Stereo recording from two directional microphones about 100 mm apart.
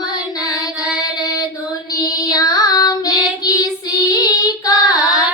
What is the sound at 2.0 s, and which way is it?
Child singing, 40° left (ahead or behind).